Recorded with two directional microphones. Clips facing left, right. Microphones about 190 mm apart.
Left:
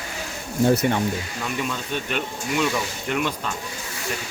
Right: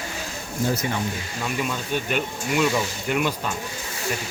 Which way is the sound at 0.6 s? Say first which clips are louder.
Left 6 dB; 55° left (ahead or behind).